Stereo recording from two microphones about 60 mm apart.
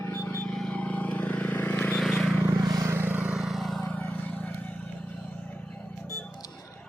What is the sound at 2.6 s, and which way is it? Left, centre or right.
Vehicle, right.